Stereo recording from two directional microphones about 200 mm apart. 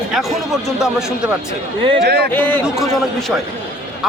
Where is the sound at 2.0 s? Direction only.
55° right (ahead or behind).